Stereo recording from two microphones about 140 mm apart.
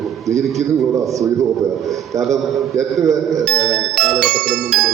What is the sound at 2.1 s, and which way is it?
Speech, 25° right (ahead or behind).